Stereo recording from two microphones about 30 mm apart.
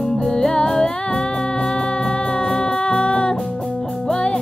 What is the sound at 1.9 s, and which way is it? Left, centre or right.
Music, left.